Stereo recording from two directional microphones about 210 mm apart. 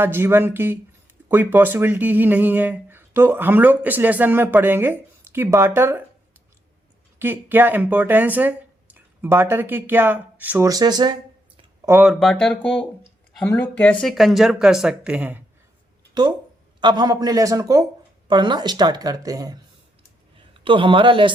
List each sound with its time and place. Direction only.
0.0 s speech: 10° right (ahead or behind)
7.2 s speech: 10° right (ahead or behind)
11.9 s speech: centre (ahead or behind)
16.8 s a woman's voice: 20° right (ahead or behind)